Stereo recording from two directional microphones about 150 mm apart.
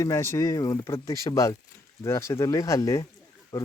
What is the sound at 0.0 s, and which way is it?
Speech, 20° left (ahead or behind).